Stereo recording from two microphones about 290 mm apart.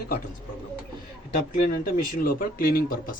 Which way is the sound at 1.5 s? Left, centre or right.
Left.